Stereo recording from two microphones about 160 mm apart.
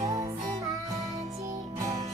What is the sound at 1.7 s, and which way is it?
Music, 25° right (ahead or behind).